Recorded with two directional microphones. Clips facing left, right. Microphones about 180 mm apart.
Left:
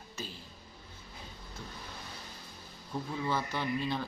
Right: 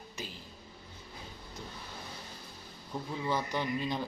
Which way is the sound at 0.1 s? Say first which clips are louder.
Left 1 dB; 15° right (ahead or behind).